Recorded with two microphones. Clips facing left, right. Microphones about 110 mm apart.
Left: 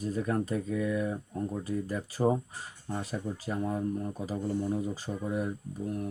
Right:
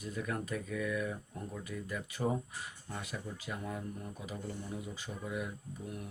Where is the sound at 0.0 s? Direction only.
35° left (ahead or behind).